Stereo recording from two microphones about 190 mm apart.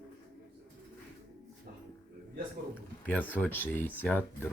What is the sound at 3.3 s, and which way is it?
Speech, 10° left (ahead or behind).